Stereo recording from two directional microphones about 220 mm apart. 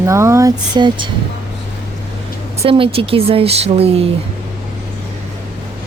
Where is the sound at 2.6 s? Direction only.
25° right (ahead or behind).